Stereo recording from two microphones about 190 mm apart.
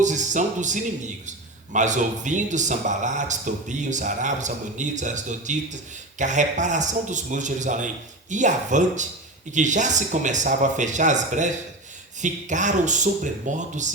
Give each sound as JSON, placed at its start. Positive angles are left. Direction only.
{"t": 0.0, "sound": "speech", "side_deg": -40}